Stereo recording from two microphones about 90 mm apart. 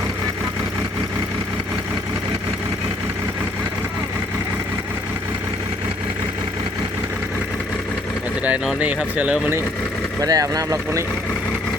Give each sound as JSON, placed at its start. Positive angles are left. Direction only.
{"t": 9.1, "sound": "speech", "side_deg": -10}
{"t": 10.2, "sound": "speech", "side_deg": -40}